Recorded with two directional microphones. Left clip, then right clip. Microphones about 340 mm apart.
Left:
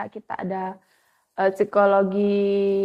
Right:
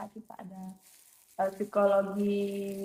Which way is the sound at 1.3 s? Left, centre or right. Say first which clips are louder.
Left 10 dB; left.